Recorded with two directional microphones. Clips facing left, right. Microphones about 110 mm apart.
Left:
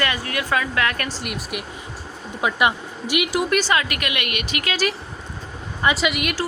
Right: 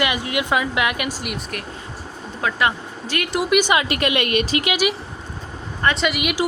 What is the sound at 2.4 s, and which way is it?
Speech, 15° left (ahead or behind).